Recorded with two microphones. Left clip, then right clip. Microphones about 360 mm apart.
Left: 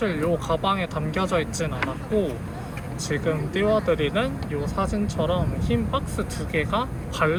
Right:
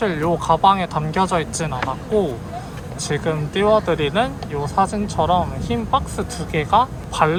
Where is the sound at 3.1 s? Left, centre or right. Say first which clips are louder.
Right 3 dB; right.